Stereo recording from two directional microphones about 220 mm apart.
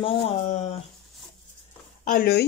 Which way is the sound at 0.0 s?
25° left (ahead or behind).